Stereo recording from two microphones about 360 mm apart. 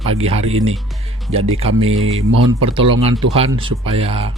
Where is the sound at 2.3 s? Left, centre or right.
Right.